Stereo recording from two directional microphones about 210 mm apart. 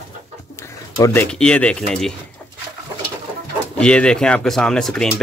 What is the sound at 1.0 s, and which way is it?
Speech, 15° left (ahead or behind).